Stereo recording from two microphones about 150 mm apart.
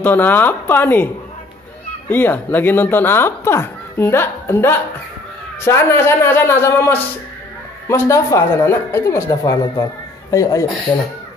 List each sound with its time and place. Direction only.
0.0 s speech: 10° left (ahead or behind)
2.0 s speech: 15° left (ahead or behind)